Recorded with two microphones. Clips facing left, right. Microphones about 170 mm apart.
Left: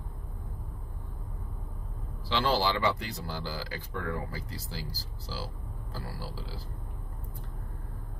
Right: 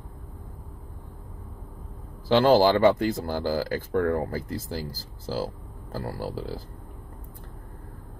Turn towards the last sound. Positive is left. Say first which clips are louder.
# right 9 dB
turn(degrees=-50)  # may be behind; listen again after turning